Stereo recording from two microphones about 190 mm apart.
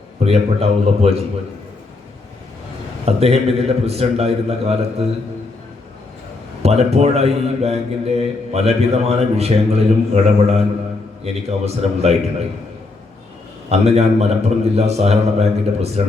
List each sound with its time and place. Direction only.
0.3 s a man's voice: 30° right (ahead or behind)
3.1 s a man's voice: 30° right (ahead or behind)
6.6 s a man's voice: 35° right (ahead or behind)
13.7 s a man's voice: 35° right (ahead or behind)